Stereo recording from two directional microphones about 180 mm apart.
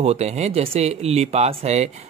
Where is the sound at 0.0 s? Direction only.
35° right (ahead or behind).